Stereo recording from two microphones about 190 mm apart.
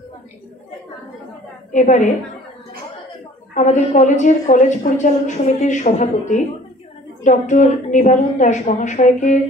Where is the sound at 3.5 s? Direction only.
40° left (ahead or behind).